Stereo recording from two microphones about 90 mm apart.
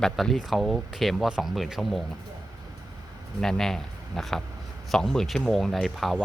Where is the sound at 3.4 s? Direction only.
5° left (ahead or behind).